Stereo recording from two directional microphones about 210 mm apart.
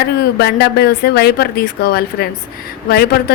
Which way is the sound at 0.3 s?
50° left (ahead or behind).